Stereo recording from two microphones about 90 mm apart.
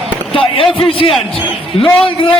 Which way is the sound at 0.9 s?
90° left.